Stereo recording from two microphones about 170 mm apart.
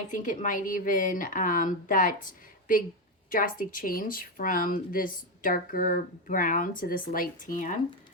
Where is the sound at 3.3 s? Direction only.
55° left (ahead or behind).